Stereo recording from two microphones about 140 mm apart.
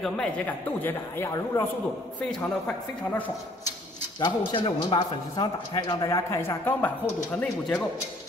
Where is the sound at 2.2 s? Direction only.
5° left (ahead or behind).